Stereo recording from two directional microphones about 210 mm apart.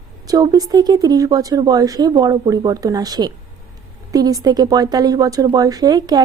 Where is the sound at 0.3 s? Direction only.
20° right (ahead or behind).